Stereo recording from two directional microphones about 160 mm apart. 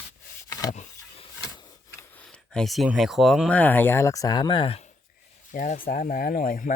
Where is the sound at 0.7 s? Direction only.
45° left (ahead or behind).